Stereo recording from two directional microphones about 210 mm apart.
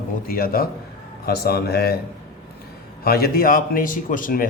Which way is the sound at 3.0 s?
45° left (ahead or behind).